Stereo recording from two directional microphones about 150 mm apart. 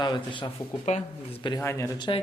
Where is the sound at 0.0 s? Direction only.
30° left (ahead or behind).